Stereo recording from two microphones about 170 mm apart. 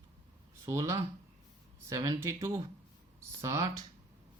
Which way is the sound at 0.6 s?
20° right (ahead or behind).